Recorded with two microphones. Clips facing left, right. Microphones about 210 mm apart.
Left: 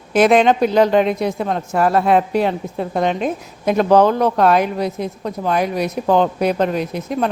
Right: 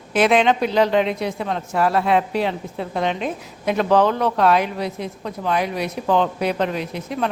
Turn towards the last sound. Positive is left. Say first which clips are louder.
# left 4 dB
turn(degrees=45)  # may be behind; listen again after turning